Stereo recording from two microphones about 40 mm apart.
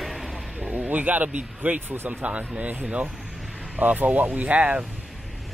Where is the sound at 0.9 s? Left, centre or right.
Right.